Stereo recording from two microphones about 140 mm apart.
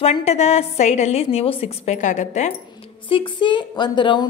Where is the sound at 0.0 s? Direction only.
50° left (ahead or behind).